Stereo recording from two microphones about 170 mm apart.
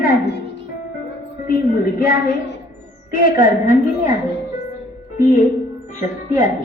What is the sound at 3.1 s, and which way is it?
A woman's voice, 55° left (ahead or behind).